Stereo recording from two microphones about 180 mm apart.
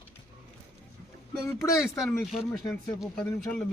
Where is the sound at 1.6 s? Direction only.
15° left (ahead or behind).